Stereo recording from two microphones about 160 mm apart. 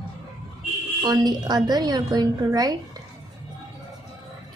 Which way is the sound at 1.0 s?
25° right (ahead or behind).